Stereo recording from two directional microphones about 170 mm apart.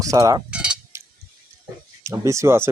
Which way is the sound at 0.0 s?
20° right (ahead or behind).